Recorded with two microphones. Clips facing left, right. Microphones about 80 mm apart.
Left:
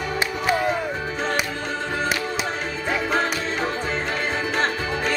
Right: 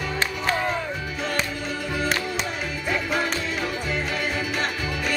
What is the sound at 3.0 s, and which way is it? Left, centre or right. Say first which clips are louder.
Music: left 2 dB; left.